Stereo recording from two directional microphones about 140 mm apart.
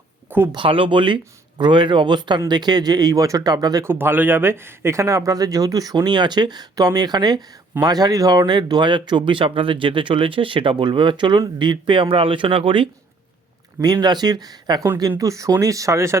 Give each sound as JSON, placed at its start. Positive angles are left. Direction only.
{"t": 0.3, "sound": "speech", "side_deg": -15}
{"t": 0.5, "sound": "speech", "side_deg": -40}
{"t": 3.9, "sound": "speech", "side_deg": -15}
{"t": 13.7, "sound": "speech", "side_deg": -25}